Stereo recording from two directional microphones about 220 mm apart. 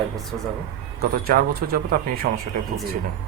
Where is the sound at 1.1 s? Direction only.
40° right (ahead or behind).